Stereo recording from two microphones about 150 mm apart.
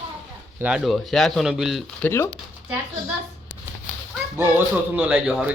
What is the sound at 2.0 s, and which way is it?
Speech, 15° left (ahead or behind).